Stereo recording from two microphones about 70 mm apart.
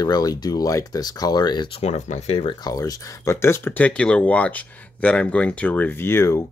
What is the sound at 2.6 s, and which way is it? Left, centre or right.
Speech, left.